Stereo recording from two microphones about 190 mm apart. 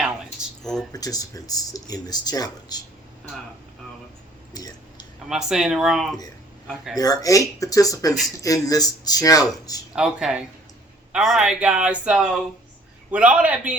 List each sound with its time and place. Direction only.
0.6 s speech: centre (ahead or behind)
0.9 s speech: 20° left (ahead or behind)
4.5 s a sound: 20° left (ahead or behind)
5.3 s speech: centre (ahead or behind)
6.9 s speech: 20° left (ahead or behind)
9.9 s a man's voice: 5° right (ahead or behind)